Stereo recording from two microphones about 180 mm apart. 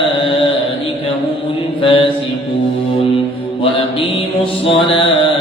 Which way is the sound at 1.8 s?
30° left (ahead or behind).